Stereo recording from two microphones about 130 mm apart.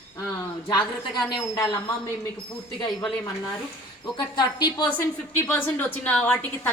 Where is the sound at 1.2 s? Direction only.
35° left (ahead or behind).